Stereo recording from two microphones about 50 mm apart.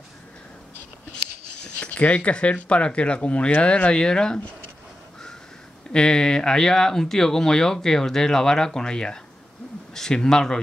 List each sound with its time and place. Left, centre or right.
1.8 s speech: left
5.9 s speech: centre